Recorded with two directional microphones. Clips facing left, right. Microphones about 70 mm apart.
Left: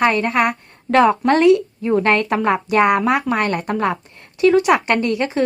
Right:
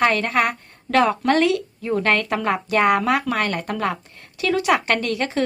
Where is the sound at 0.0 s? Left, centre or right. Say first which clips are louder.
Left 2 dB; left.